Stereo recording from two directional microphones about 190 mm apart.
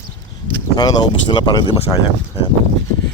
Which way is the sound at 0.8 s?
20° left (ahead or behind).